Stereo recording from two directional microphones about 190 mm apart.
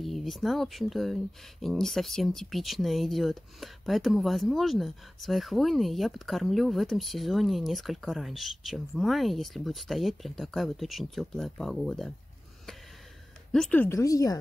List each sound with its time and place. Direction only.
0.0 s speech: centre (ahead or behind)
13.5 s a woman's voice: 5° left (ahead or behind)